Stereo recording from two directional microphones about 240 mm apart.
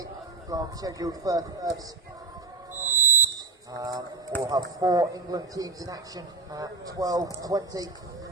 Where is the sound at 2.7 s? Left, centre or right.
Right.